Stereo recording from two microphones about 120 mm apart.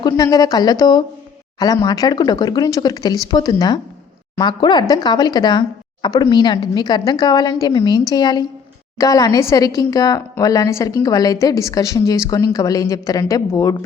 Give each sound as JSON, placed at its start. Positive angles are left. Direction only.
{"t": 0.0, "sound": "a woman's voice", "side_deg": 30}